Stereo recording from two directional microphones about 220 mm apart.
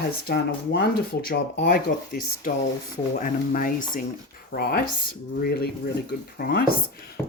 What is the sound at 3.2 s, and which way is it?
Speech, 35° left (ahead or behind).